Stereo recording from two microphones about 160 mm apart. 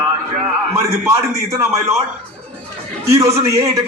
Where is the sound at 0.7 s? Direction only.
20° right (ahead or behind).